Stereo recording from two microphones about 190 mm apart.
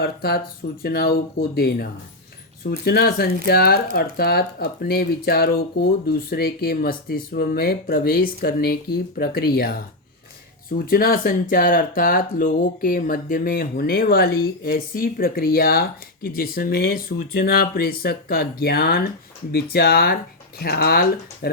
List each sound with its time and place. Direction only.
0.0 s speech: 55° left (ahead or behind)
10.8 s speech: 50° left (ahead or behind)